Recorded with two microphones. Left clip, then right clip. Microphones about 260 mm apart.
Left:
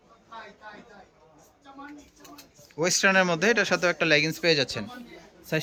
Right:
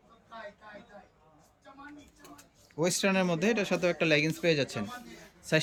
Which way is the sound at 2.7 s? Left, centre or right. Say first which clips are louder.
Left 7 dB; centre.